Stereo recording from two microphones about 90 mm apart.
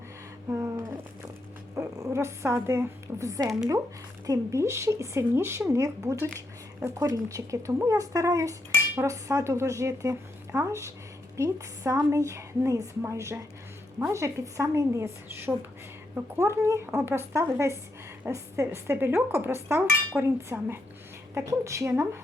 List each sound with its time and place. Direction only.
0.5 s a sound: 30° right (ahead or behind)
1.7 s dog: 30° right (ahead or behind)
2.1 s speech: 30° right (ahead or behind)